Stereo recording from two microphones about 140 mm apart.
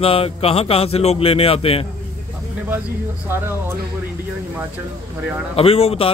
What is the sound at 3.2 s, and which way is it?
Speech, 15° right (ahead or behind).